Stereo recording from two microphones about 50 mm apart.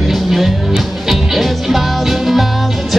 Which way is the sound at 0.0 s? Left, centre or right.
Centre.